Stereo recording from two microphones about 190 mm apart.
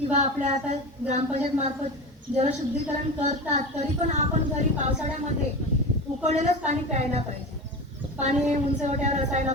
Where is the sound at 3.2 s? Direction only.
40° right (ahead or behind).